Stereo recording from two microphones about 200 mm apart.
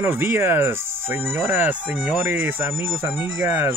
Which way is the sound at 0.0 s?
10° right (ahead or behind).